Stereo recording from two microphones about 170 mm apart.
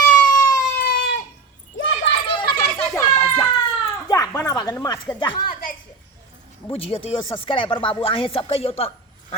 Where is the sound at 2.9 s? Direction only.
15° left (ahead or behind).